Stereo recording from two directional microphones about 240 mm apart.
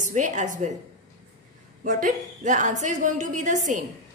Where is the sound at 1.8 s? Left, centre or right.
Right.